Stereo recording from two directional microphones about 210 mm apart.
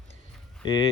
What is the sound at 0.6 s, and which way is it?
Speech, 25° left (ahead or behind).